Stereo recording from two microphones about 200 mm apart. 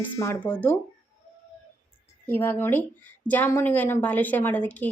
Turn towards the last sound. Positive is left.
turn(degrees=10)  # may be behind; listen again after turning